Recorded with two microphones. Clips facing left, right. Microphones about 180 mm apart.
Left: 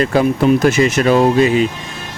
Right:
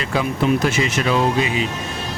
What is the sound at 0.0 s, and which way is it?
Speech, 45° left (ahead or behind).